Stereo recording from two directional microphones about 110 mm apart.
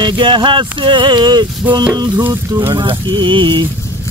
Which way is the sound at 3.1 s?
45° right (ahead or behind).